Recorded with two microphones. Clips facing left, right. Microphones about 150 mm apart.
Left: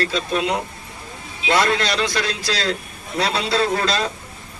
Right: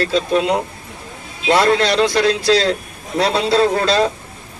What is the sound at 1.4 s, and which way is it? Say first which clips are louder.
Speech: right 5 dB; 30° right (ahead or behind).